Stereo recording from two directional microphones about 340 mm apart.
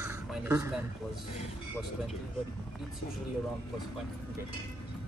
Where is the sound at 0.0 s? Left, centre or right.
Centre.